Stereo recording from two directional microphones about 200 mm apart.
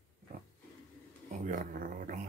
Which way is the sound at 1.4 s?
40° right (ahead or behind).